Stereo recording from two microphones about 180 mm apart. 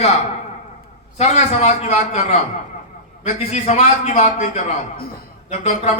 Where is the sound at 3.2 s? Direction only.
40° left (ahead or behind).